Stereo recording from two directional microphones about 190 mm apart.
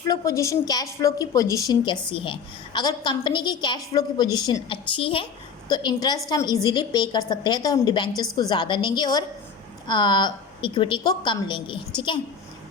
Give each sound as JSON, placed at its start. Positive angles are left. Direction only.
{"t": 0.1, "sound": "a woman's voice", "side_deg": 15}